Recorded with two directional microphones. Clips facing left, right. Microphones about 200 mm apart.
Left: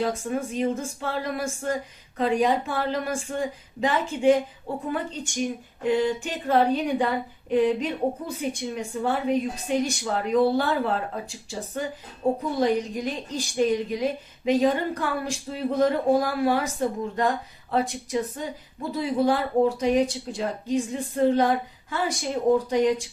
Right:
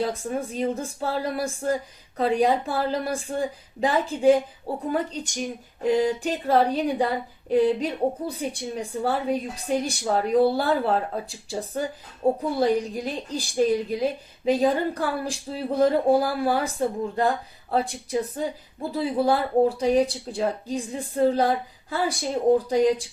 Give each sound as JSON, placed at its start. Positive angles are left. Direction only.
{"t": 0.3, "sound": "a woman's voice", "side_deg": -35}